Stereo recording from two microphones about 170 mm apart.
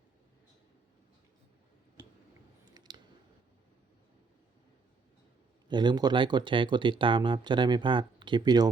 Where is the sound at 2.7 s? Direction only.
25° right (ahead or behind).